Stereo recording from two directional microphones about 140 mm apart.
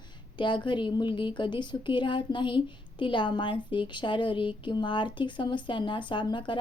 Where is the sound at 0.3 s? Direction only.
35° left (ahead or behind).